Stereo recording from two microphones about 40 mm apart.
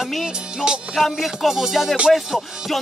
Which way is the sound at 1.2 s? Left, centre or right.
Centre.